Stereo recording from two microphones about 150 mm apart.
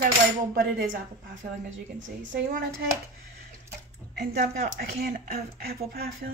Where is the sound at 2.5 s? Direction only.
65° right (ahead or behind).